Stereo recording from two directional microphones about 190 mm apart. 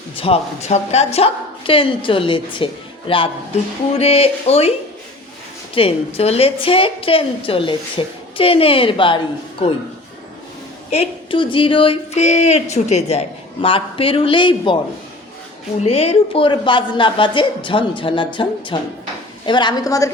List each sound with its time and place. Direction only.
0.2 s a woman's voice: 35° left (ahead or behind)
5.7 s a woman's voice: 30° left (ahead or behind)
10.9 s a woman's voice: 30° left (ahead or behind)
15.8 s a woman's voice: 35° left (ahead or behind); by 20.1 s 20° left (ahead or behind)